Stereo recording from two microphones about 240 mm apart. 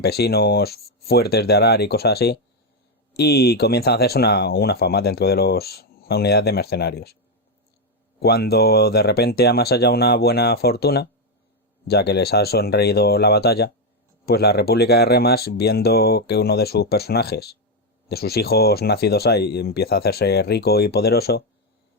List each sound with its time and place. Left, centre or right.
0.0 s speech: left
8.2 s speech: left